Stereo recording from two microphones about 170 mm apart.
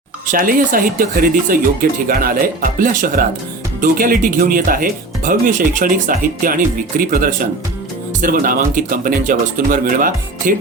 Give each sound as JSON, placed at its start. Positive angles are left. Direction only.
{"t": 0.3, "sound": "speech", "side_deg": -55}